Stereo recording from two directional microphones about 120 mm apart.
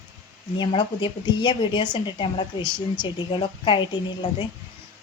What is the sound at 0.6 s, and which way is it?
A woman's voice, 40° left (ahead or behind).